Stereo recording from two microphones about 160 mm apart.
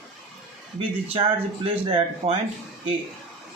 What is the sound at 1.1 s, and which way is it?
Speech, 35° right (ahead or behind).